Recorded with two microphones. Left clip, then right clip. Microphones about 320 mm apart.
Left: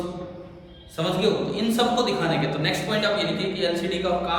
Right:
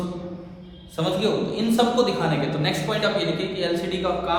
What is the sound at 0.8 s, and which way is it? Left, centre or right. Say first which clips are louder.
A man's voice: even; centre.